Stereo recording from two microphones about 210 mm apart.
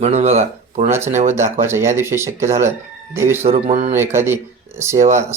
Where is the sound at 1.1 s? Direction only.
35° right (ahead or behind).